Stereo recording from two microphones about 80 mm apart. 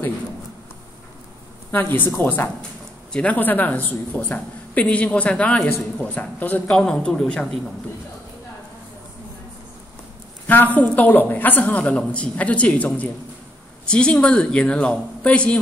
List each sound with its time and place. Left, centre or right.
1.7 s a woman's voice: left; by 7.4 s centre
10.4 s a woman's voice: left